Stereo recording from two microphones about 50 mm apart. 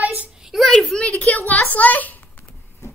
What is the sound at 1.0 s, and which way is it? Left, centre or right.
A woman's voice, left.